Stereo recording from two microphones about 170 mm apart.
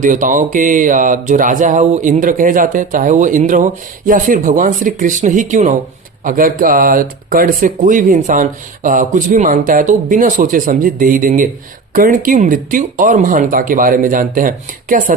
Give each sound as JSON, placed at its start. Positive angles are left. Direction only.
{"t": 0.0, "sound": "speech", "side_deg": -50}